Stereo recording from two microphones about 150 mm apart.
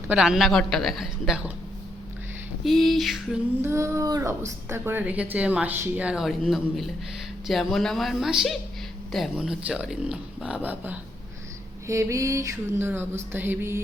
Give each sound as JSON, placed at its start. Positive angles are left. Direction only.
{"t": 0.1, "sound": "speech", "side_deg": -5}
{"t": 2.6, "sound": "speech", "side_deg": 0}
{"t": 3.6, "sound": "a woman's voice", "side_deg": -20}